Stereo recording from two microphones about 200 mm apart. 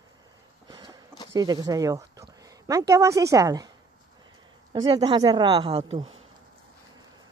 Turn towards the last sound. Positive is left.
turn(degrees=-25)  # may be behind; listen again after turning